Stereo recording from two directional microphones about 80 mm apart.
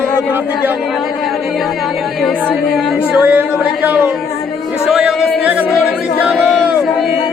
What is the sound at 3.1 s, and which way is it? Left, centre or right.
Speech, centre.